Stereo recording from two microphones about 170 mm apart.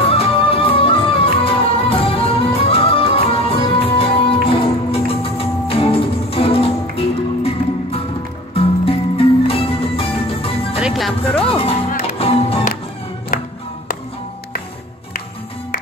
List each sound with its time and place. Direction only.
0.0 s music: 35° left (ahead or behind)
10.8 s music: centre (ahead or behind)
11.4 s music: 35° left (ahead or behind)
13.3 s music: 55° left (ahead or behind)